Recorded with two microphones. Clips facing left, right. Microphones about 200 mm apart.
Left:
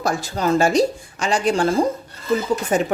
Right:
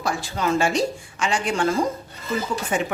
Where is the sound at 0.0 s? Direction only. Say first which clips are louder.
Left 3 dB; 45° left (ahead or behind).